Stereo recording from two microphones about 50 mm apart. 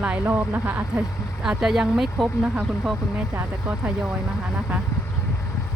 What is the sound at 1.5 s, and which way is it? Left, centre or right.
Speech, centre.